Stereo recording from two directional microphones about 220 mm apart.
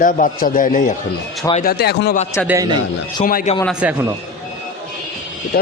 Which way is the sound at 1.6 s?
45° left (ahead or behind).